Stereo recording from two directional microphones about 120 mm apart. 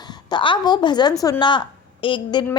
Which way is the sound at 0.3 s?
40° left (ahead or behind).